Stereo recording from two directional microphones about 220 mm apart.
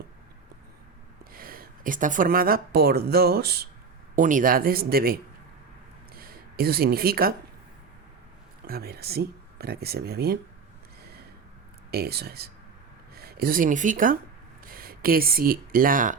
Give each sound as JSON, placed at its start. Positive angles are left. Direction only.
{"t": 1.2, "sound": "speech", "side_deg": -40}
{"t": 6.1, "sound": "speech", "side_deg": -45}
{"t": 8.6, "sound": "speech", "side_deg": -45}
{"t": 11.9, "sound": "speech", "side_deg": -45}